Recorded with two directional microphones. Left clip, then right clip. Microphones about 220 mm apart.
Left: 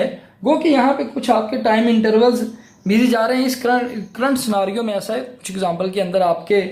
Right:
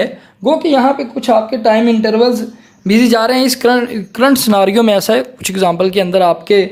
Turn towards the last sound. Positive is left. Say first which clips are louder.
# right 6 dB
turn(degrees=-45)  # may be behind; listen again after turning